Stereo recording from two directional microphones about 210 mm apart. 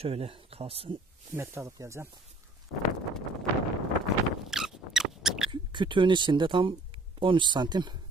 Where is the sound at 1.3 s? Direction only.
10° right (ahead or behind).